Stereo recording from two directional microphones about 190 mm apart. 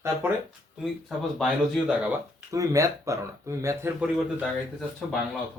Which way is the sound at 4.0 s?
Centre (ahead or behind).